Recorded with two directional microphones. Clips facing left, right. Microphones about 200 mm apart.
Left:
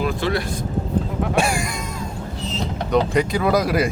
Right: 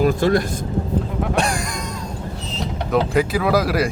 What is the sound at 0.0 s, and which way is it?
Speech, 45° right (ahead or behind).